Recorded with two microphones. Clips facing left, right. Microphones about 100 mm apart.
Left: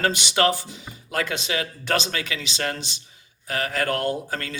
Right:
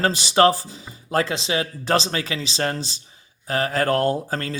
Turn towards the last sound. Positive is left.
turn(degrees=-35)  # may be behind; listen again after turning